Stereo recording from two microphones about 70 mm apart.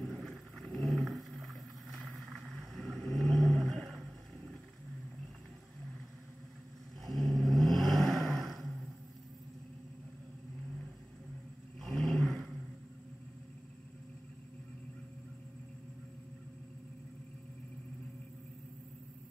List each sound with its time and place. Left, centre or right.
0.0 s a sound: centre
7.1 s vehicle: centre
11.8 s vehicle: centre